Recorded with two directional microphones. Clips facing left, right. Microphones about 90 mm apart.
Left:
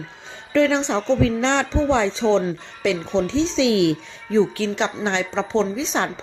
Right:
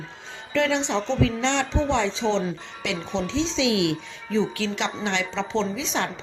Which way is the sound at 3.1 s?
45° left (ahead or behind).